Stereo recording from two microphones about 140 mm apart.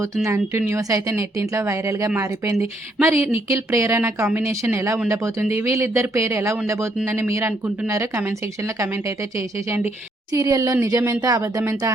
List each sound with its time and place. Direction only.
0.3 s speech: 20° right (ahead or behind)